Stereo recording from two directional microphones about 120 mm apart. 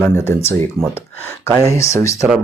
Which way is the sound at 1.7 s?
25° left (ahead or behind).